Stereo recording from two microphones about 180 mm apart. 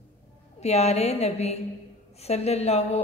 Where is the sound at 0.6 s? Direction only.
35° left (ahead or behind).